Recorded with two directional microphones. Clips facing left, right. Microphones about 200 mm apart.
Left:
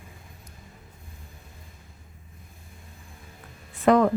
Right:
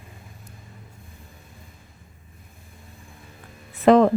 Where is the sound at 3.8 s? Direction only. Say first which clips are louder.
Right 4 dB; 25° right (ahead or behind).